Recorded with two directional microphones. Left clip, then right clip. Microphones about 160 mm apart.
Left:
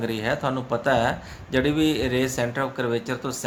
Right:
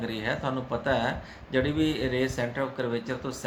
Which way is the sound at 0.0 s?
40° left (ahead or behind).